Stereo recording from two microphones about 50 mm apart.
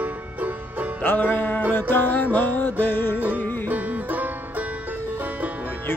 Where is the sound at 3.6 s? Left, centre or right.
Right.